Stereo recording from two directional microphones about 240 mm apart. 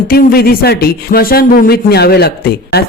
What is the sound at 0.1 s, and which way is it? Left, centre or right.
Speech, left.